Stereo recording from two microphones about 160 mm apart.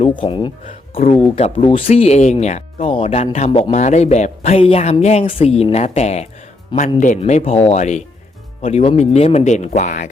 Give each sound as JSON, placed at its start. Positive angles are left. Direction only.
{"t": 0.0, "sound": "speech", "side_deg": 30}
{"t": 0.6, "sound": "speech", "side_deg": 50}